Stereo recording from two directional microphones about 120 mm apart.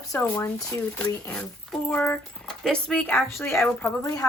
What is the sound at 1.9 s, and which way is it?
Speech, 15° left (ahead or behind).